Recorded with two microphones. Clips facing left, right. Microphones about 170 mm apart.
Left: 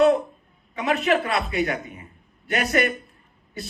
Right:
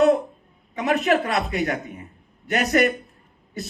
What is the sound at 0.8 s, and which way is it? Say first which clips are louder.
A man's voice: right 1 dB; 40° right (ahead or behind).